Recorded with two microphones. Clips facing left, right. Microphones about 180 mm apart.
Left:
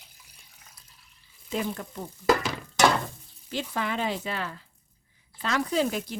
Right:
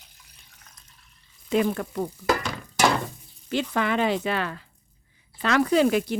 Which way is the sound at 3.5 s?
70° right (ahead or behind).